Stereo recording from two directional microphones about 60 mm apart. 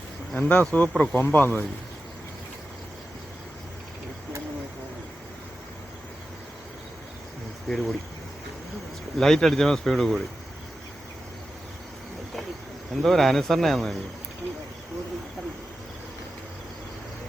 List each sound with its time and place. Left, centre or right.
0.3 s speech: left
7.7 s speech: centre
9.1 s speech: centre
12.9 s speech: centre